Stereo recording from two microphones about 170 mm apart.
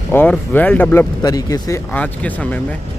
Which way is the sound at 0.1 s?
10° left (ahead or behind).